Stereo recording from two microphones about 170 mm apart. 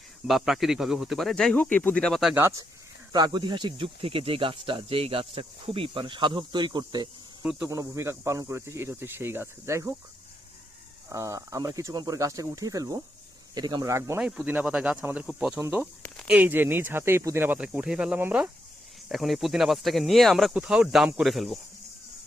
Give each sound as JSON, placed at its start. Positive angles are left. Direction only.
{"t": 0.3, "sound": "speech", "side_deg": 0}
{"t": 2.3, "sound": "speech", "side_deg": -15}
{"t": 11.1, "sound": "speech", "side_deg": -20}
{"t": 14.2, "sound": "speech", "side_deg": -5}